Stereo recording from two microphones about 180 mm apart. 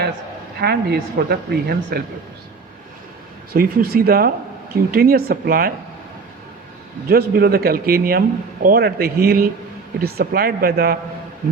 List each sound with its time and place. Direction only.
0.6 s speech: 60° right (ahead or behind)
3.5 s speech: 55° right (ahead or behind)
7.1 s speech: 60° right (ahead or behind)